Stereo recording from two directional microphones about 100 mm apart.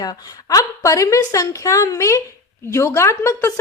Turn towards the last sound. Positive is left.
turn(degrees=30)  # may be behind; listen again after turning